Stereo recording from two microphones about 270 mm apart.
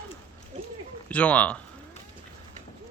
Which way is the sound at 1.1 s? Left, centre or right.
Centre.